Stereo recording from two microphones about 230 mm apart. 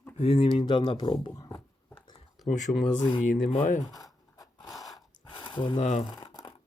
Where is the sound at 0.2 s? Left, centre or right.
Left.